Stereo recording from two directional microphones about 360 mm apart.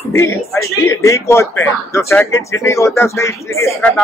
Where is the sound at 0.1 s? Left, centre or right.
Centre.